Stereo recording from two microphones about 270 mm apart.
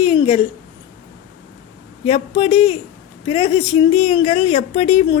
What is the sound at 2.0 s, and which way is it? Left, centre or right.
Speech, centre.